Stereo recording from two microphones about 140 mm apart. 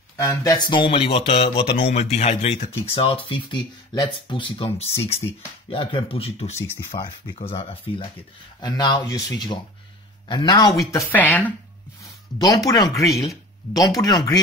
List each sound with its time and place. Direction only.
0.2 s speech: 20° left (ahead or behind); by 7.7 s 45° left (ahead or behind)
8.5 s speech: 30° left (ahead or behind)
10.9 s speech: 15° left (ahead or behind)
12.0 s a sound: 25° left (ahead or behind)
12.6 s speech: 25° left (ahead or behind)